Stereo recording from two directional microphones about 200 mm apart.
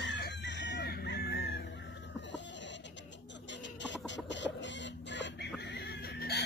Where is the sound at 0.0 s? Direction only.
60° left (ahead or behind).